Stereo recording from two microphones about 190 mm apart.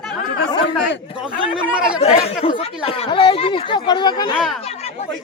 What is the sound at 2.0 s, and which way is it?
Speech, 35° left (ahead or behind).